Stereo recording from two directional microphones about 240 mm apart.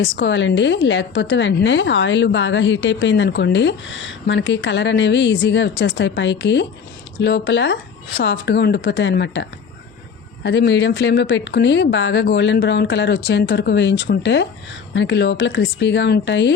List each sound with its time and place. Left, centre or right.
0.0 s a woman's voice: left